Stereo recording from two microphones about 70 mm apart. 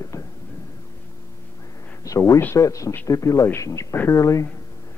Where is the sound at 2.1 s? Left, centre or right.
Left.